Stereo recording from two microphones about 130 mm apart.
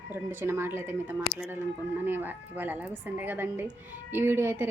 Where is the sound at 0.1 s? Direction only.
15° right (ahead or behind).